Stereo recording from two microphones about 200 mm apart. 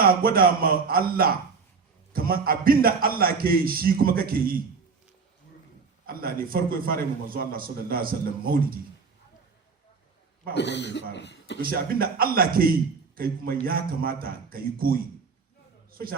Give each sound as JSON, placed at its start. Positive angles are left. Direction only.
{"t": 0.0, "sound": "a man's voice", "side_deg": -45}
{"t": 6.1, "sound": "a man's voice", "side_deg": -45}
{"t": 10.5, "sound": "speech", "side_deg": 60}
{"t": 11.6, "sound": "a man's voice", "side_deg": -45}